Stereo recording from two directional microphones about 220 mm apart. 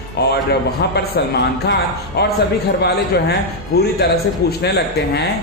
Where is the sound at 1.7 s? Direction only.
45° left (ahead or behind).